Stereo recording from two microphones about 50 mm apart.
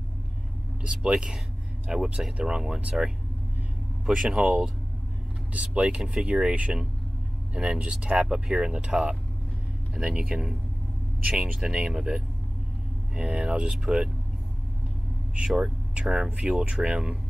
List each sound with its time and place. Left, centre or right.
0.8 s speech: right
5.5 s speech: right
15.3 s speech: centre